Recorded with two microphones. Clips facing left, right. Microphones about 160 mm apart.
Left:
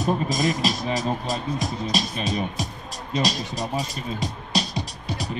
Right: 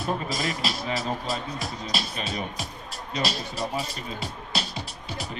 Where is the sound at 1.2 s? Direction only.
40° left (ahead or behind).